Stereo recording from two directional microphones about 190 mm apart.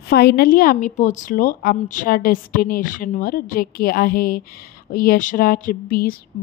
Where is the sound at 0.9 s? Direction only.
40° left (ahead or behind).